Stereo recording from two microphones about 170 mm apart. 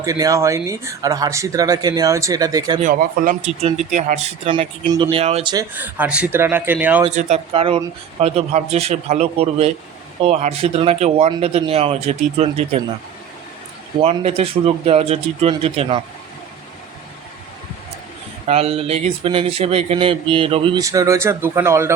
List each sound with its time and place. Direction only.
0.0 s speech: 20° right (ahead or behind)
2.8 s speech: 50° right (ahead or behind)
4.4 s speech: 30° right (ahead or behind)
5.7 s speech: 10° right (ahead or behind)
7.2 s speech: 40° right (ahead or behind)
14.0 s speech: 35° right (ahead or behind)
18.4 s speech: 35° right (ahead or behind)
20.8 s speech: 20° right (ahead or behind)